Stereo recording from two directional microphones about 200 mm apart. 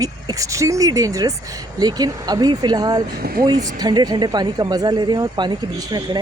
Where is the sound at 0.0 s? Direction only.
15° right (ahead or behind).